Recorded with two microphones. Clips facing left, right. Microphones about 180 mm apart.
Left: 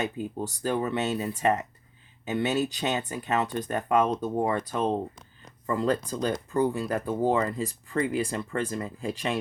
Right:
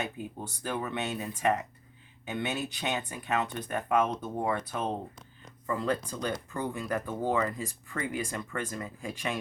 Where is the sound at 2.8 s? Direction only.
40° left (ahead or behind).